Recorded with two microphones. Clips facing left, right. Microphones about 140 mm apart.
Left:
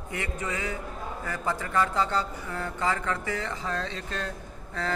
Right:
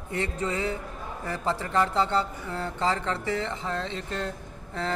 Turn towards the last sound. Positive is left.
turn(degrees=-20)  # may be behind; listen again after turning